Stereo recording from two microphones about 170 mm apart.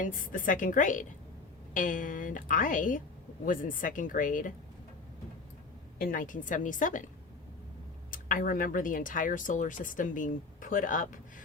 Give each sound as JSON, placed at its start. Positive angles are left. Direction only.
{"t": 0.0, "sound": "speech", "side_deg": 50}
{"t": 6.0, "sound": "speech", "side_deg": 55}
{"t": 8.1, "sound": "speech", "side_deg": 50}